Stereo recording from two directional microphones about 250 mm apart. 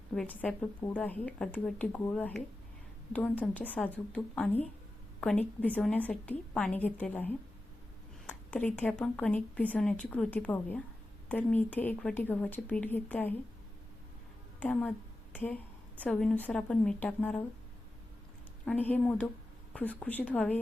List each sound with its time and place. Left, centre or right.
0.1 s speech: centre
14.6 s speech: centre
18.6 s speech: centre